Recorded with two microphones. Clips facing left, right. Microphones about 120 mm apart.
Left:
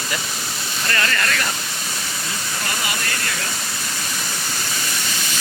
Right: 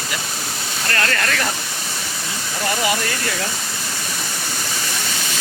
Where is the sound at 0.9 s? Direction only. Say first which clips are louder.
Right 1 dB; 65° right (ahead or behind).